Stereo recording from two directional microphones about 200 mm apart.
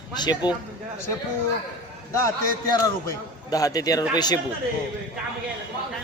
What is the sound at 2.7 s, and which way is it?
A man's voice, 20° left (ahead or behind).